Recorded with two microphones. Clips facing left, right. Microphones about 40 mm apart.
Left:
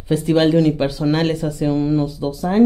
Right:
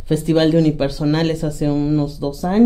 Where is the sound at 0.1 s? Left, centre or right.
Centre.